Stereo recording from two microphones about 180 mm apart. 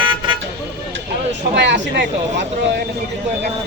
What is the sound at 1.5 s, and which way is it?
Speech, 75° right (ahead or behind).